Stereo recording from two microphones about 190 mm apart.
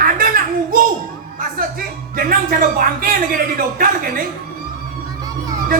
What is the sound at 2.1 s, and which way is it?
Speech, 50° right (ahead or behind).